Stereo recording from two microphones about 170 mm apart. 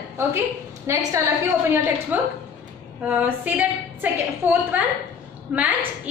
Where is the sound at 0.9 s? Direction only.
15° right (ahead or behind).